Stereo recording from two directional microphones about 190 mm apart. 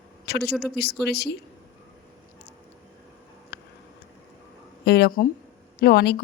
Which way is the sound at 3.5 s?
60° left (ahead or behind).